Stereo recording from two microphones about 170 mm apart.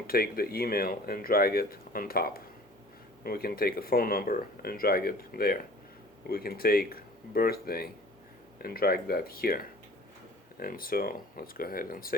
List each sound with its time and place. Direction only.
0.1 s speech: 60° left (ahead or behind)